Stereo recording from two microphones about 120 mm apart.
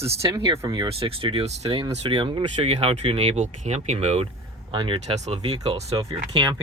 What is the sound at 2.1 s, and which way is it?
Speech, 40° right (ahead or behind).